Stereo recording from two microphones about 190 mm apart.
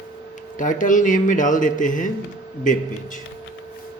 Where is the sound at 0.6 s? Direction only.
45° left (ahead or behind).